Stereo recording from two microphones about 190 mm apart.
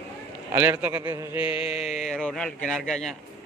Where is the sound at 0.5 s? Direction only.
10° right (ahead or behind).